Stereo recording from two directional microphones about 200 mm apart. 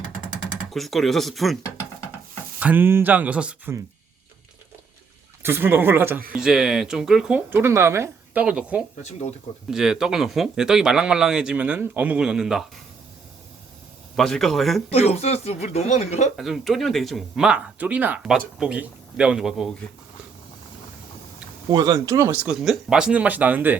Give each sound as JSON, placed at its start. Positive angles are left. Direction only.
{"t": 0.7, "sound": "speech", "side_deg": 0}
{"t": 2.6, "sound": "speech", "side_deg": -10}
{"t": 5.4, "sound": "speech", "side_deg": -10}
{"t": 9.0, "sound": "speech", "side_deg": 35}
{"t": 9.6, "sound": "speech", "side_deg": -5}
{"t": 14.2, "sound": "speech", "side_deg": 0}
{"t": 14.8, "sound": "speech", "side_deg": 30}
{"t": 16.4, "sound": "speech", "side_deg": 0}
{"t": 21.7, "sound": "speech", "side_deg": -20}